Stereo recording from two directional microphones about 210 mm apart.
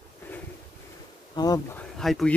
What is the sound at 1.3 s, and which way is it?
Speech, 20° left (ahead or behind).